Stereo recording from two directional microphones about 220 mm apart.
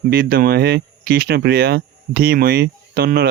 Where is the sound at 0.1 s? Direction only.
40° right (ahead or behind).